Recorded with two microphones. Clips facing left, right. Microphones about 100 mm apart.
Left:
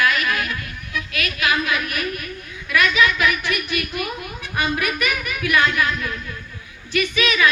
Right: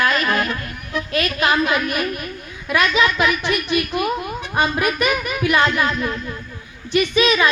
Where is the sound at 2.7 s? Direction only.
25° right (ahead or behind).